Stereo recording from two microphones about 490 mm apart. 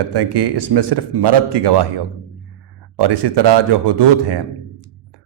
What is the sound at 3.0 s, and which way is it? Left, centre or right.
Speech, right.